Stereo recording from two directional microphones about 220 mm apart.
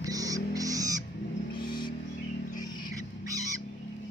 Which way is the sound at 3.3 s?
15° right (ahead or behind).